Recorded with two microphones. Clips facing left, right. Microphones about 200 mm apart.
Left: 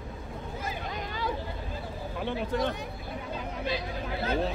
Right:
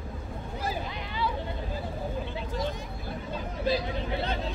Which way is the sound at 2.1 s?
65° left (ahead or behind).